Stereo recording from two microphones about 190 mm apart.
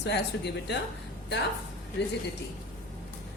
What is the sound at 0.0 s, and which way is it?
Speech, 65° left (ahead or behind).